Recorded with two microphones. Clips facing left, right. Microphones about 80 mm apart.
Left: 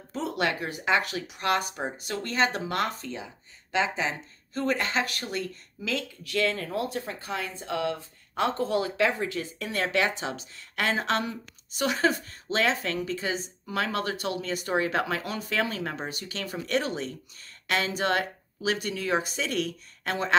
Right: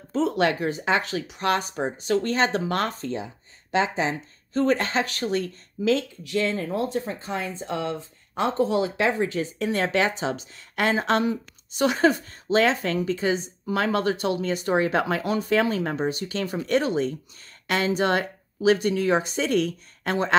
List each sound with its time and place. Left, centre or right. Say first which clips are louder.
0.1 s speech: right 6 dB; right